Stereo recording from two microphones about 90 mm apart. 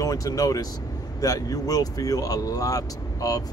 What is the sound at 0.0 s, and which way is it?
Speech, 40° left (ahead or behind).